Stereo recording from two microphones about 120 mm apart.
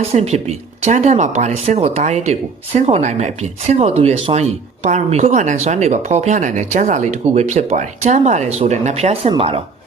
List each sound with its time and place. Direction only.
0.0 s speech: 65° right (ahead or behind)